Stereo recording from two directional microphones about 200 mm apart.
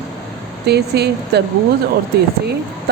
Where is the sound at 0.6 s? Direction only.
55° right (ahead or behind).